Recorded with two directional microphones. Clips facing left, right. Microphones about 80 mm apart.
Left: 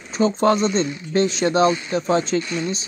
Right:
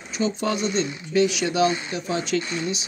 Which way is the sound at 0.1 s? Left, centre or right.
Left.